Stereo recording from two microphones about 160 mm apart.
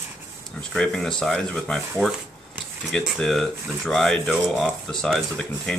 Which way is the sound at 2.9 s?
5° left (ahead or behind).